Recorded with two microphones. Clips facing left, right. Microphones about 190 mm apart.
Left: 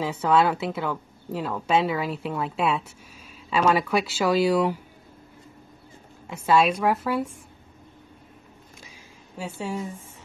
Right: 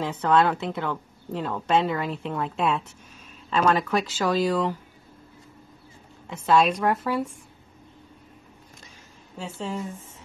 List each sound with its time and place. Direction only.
0.0 s a woman's voice: 5° left (ahead or behind)
6.2 s a woman's voice: 5° left (ahead or behind)
9.4 s speech: 10° left (ahead or behind)